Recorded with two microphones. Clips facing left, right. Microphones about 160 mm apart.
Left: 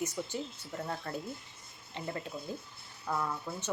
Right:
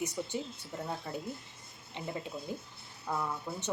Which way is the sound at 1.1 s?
10° right (ahead or behind).